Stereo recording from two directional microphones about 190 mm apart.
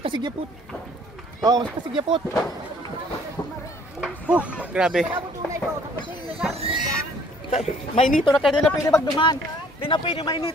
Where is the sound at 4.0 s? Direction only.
5° right (ahead or behind).